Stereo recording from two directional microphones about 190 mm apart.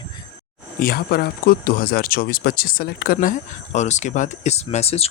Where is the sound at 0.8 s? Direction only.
50° left (ahead or behind).